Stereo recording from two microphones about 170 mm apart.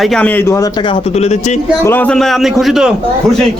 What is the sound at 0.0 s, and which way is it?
A man's voice, 5° left (ahead or behind).